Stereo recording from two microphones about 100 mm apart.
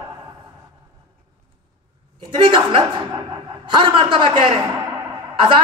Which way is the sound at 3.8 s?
55° right (ahead or behind).